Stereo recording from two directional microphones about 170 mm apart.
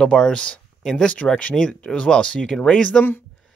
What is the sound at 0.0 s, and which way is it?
Speech, 5° left (ahead or behind).